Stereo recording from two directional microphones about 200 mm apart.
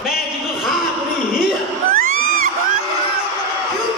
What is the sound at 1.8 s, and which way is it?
Crowd, 45° right (ahead or behind).